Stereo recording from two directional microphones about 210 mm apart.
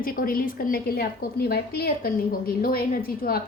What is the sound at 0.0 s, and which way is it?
A woman's voice, 45° left (ahead or behind).